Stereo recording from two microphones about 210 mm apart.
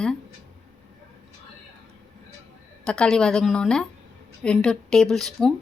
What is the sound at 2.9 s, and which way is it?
A woman's voice, 5° left (ahead or behind).